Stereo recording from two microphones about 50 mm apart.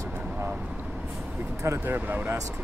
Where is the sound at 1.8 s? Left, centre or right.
Right.